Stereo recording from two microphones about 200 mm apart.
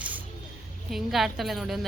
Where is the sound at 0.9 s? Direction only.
Centre (ahead or behind).